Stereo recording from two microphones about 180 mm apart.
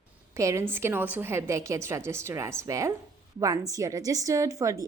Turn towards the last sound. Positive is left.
turn(degrees=-15)  # may be behind; listen again after turning